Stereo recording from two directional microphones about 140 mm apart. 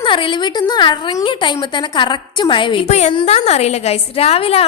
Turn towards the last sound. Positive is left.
turn(degrees=45)  # may be behind; listen again after turning